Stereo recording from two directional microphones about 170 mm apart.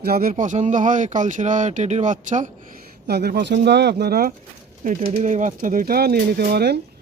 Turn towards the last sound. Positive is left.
turn(degrees=-70)  # may be behind; listen again after turning